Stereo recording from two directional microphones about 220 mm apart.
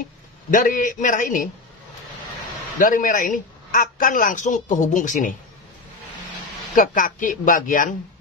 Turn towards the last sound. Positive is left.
turn(degrees=35)  # may be behind; listen again after turning